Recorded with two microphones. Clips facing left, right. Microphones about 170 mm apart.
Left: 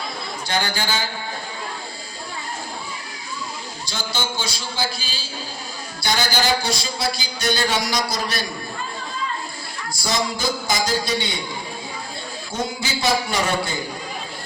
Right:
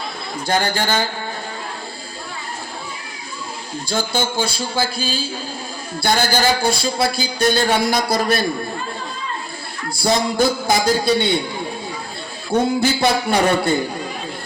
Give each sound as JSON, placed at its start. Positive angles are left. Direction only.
{"t": 0.4, "sound": "a man's voice", "side_deg": -50}
{"t": 3.8, "sound": "a man's voice", "side_deg": -50}
{"t": 9.9, "sound": "speech", "side_deg": -55}
{"t": 12.5, "sound": "speech", "side_deg": -55}